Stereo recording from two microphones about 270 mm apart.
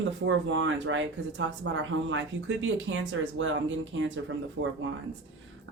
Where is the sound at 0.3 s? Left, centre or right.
Right.